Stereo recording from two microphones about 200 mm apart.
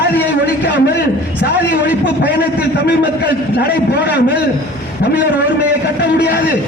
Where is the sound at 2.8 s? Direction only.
55° left (ahead or behind).